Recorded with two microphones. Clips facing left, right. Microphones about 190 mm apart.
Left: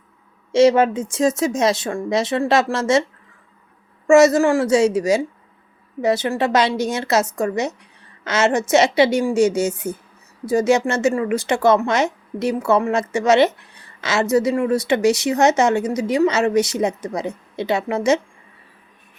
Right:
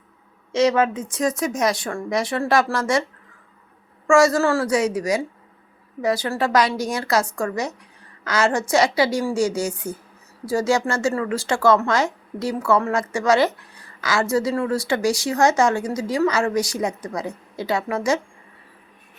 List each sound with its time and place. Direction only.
0.5 s speech: 30° left (ahead or behind)
4.0 s speech: 20° left (ahead or behind)